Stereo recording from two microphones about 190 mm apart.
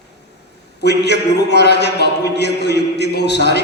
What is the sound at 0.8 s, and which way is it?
A man's voice, 60° left (ahead or behind).